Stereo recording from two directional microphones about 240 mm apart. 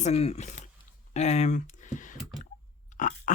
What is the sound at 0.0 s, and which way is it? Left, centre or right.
Speech, left.